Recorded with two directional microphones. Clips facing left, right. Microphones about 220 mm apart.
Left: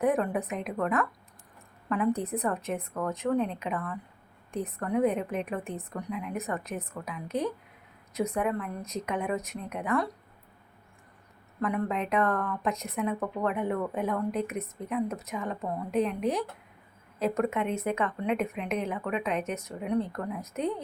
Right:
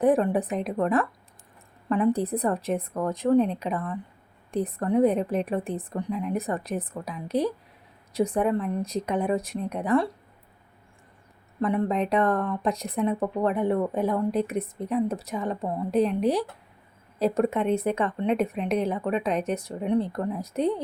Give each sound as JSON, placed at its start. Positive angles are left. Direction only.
{"t": 0.0, "sound": "speech", "side_deg": -35}
{"t": 11.6, "sound": "speech", "side_deg": -30}